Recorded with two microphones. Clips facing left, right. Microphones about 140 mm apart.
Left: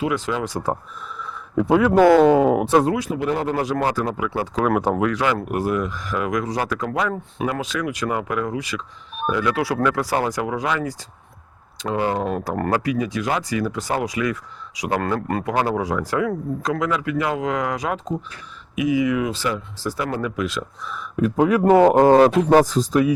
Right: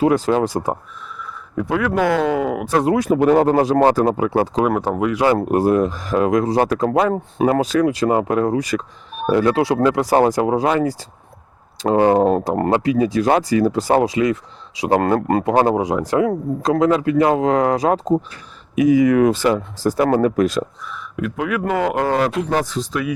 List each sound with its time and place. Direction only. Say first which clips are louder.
0.0 s speech: right 7 dB; 40° right (ahead or behind)
1.5 s speech: left 4 dB; 20° left (ahead or behind)
2.9 s speech: right 8 dB; 50° right (ahead or behind)
3.6 s speech: right 7 dB; 30° right (ahead or behind)
3.8 s speech: right 7 dB; 40° right (ahead or behind)
4.9 s speech: right 1 dB; centre (ahead or behind)
5.2 s speech: right 6 dB; 35° right (ahead or behind)
12.1 s speech: right 9 dB; 35° right (ahead or behind)
12.5 s speech: right 5 dB; 25° right (ahead or behind); by 20.7 s 40° right (ahead or behind)
20.9 s speech: left 5 dB; 35° left (ahead or behind)